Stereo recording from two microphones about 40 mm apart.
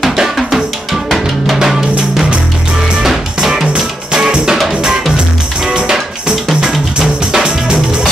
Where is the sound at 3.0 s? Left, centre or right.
Centre.